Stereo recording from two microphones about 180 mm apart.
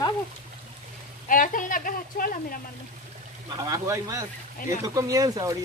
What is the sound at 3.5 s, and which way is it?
Speech, 20° right (ahead or behind).